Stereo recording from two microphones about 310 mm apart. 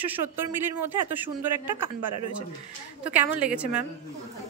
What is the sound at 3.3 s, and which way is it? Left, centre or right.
Speech, centre.